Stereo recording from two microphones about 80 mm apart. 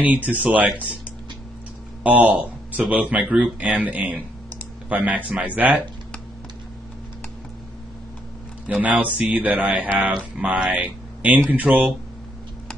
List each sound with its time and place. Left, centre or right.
0.0 s speech: centre
2.0 s speech: centre
8.6 s speech: centre